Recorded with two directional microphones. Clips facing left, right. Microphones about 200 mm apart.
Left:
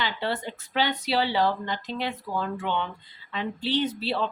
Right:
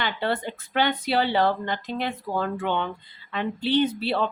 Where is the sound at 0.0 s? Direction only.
55° right (ahead or behind).